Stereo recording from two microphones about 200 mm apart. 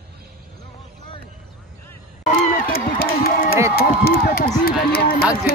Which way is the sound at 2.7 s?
45° left (ahead or behind).